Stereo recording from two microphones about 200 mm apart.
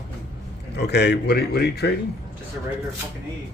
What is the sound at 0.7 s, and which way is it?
A man's voice, 55° left (ahead or behind).